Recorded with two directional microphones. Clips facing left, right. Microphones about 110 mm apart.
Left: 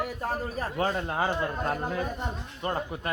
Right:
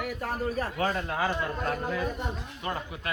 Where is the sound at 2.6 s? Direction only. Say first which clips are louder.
Left 6 dB; 35° left (ahead or behind).